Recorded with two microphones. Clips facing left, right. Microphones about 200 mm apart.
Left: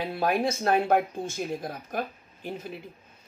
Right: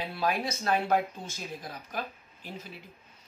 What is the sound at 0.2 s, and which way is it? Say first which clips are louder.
Speech: left 5 dB; 50° left (ahead or behind).